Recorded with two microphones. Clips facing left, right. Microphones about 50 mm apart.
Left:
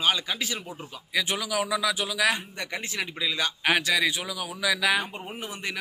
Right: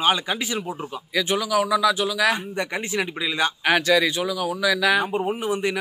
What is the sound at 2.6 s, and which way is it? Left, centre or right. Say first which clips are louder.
Speech: right 7 dB; right.